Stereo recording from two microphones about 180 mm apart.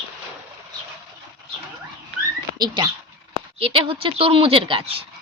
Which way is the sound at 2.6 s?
25° right (ahead or behind).